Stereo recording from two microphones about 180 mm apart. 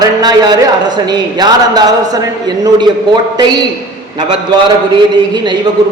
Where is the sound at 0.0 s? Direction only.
25° right (ahead or behind).